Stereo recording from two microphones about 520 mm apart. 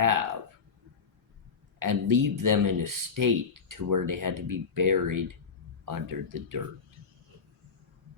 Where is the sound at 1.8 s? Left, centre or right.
Right.